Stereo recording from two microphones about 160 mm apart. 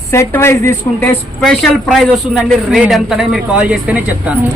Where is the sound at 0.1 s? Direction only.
15° left (ahead or behind).